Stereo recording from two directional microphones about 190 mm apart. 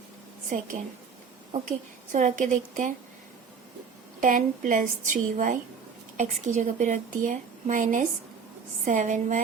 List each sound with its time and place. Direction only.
0.5 s a woman's voice: 45° right (ahead or behind)
2.1 s speech: 40° right (ahead or behind)
4.2 s a woman's voice: 45° right (ahead or behind)